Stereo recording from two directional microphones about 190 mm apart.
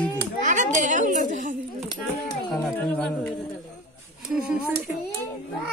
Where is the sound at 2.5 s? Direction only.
5° left (ahead or behind).